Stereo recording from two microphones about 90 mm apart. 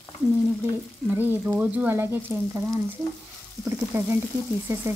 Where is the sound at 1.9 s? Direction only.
25° right (ahead or behind).